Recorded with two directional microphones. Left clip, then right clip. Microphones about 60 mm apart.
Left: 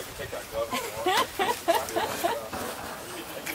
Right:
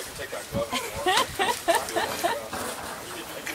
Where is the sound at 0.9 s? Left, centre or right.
Right.